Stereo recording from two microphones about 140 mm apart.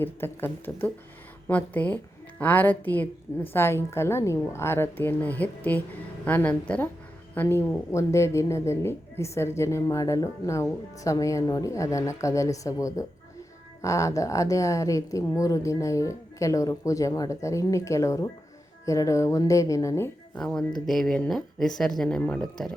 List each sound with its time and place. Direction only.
0.0 s a woman's voice: 15° left (ahead or behind)
20.3 s a woman's voice: 5° left (ahead or behind)